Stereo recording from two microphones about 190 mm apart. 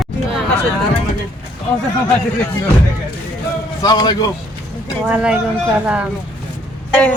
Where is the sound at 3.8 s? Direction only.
20° left (ahead or behind).